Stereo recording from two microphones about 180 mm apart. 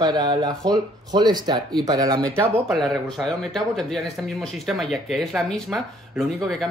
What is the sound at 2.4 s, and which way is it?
Speech, 10° right (ahead or behind).